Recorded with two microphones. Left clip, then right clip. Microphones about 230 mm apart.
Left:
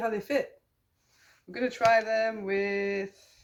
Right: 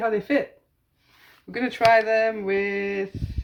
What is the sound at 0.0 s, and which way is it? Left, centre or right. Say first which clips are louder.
Speech: right 6 dB; centre.